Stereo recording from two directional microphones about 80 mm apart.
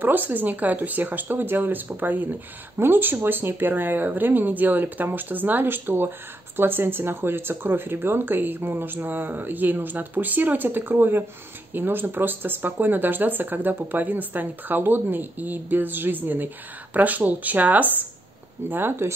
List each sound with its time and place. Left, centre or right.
0.0 s speech: right